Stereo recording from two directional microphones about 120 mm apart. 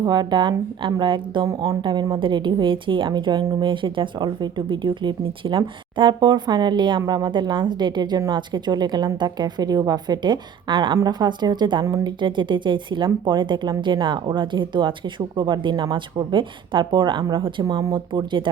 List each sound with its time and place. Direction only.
0.0 s speech: 35° right (ahead or behind)